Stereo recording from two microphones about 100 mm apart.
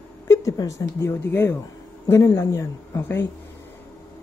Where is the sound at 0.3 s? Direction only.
35° left (ahead or behind).